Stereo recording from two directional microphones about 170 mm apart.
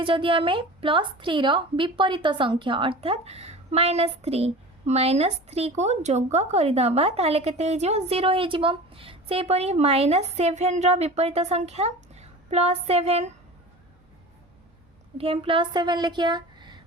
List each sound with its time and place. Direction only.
0.0 s a woman's voice: 30° right (ahead or behind)
15.2 s a woman's voice: 30° right (ahead or behind)